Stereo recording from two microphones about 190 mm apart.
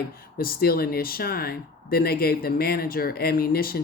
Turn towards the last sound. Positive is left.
turn(degrees=50)  # may be behind; listen again after turning